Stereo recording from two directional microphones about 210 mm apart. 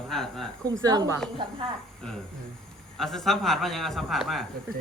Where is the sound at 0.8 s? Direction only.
20° right (ahead or behind).